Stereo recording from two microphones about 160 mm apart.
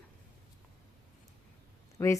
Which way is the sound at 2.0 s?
15° left (ahead or behind).